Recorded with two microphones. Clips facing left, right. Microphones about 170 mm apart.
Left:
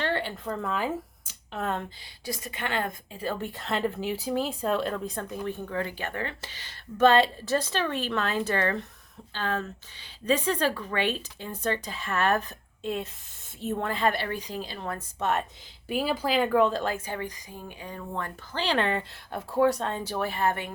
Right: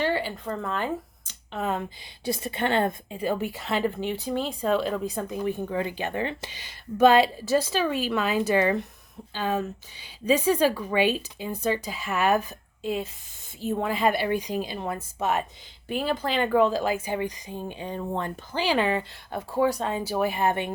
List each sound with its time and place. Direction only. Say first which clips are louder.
0.0 s speech: right 3 dB; 5° right (ahead or behind)
2.2 s a woman's voice: right 7 dB; 30° right (ahead or behind)
3.2 s speech: right 4 dB; 15° right (ahead or behind)
3.5 s speech: right 2 dB; centre (ahead or behind)
5.3 s speech: right 5 dB; 15° right (ahead or behind)